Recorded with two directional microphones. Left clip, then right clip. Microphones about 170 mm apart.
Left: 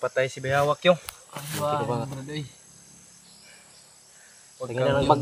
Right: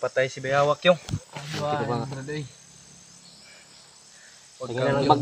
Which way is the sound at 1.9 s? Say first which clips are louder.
Even; centre (ahead or behind).